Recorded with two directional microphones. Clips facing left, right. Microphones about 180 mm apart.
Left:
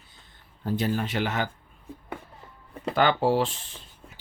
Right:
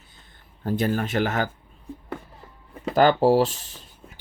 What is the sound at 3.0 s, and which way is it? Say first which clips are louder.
Speech: right 5 dB; 40° right (ahead or behind).